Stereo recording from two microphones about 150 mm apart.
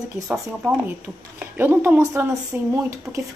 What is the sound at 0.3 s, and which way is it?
Speech, 10° right (ahead or behind).